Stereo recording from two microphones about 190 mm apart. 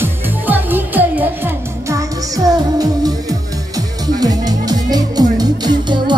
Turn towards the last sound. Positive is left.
turn(degrees=-25)  # may be behind; listen again after turning